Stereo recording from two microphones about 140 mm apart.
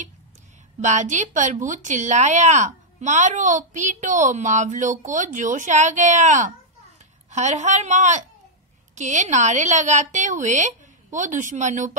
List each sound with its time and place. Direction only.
0.7 s speech: 60° right (ahead or behind)